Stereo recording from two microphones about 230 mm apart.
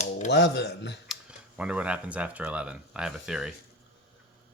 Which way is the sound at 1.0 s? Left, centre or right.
Centre.